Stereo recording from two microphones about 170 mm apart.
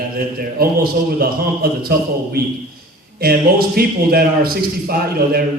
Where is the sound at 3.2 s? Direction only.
65° right (ahead or behind).